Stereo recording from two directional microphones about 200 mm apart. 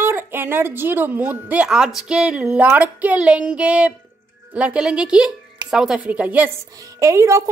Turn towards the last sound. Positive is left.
turn(degrees=-15)  # may be behind; listen again after turning